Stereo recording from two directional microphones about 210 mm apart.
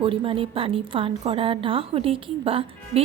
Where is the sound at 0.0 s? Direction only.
25° right (ahead or behind).